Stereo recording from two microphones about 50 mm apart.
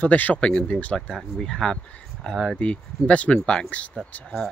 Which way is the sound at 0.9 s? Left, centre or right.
Centre.